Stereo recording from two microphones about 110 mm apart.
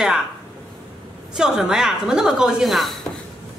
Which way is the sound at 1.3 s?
5° right (ahead or behind).